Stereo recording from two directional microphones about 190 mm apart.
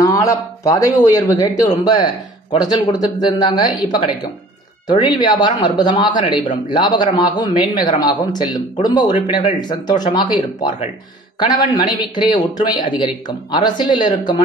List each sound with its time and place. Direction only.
0.0 s speech: 15° left (ahead or behind)